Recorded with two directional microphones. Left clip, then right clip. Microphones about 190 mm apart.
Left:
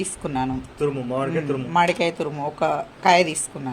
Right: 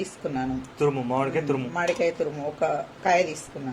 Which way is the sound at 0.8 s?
10° right (ahead or behind).